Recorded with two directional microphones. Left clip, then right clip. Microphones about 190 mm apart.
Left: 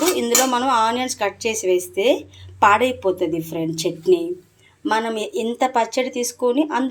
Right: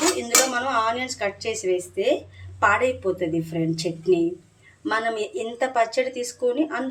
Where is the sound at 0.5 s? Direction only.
30° left (ahead or behind).